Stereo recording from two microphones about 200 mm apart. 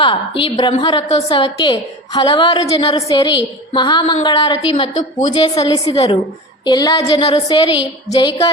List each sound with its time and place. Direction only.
0.0 s a woman's voice: 25° left (ahead or behind)